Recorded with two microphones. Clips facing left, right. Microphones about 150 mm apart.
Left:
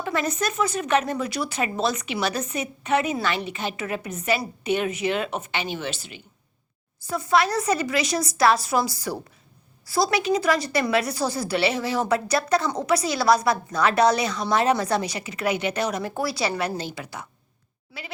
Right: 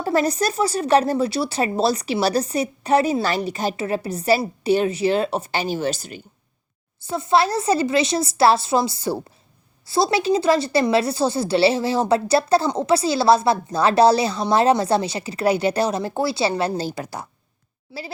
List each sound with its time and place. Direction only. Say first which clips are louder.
0.0 s speech: right 6 dB; 35° right (ahead or behind)
7.1 s a woman's voice: right 3 dB; 25° right (ahead or behind)
17.9 s a woman's voice: right 7 dB; 25° right (ahead or behind)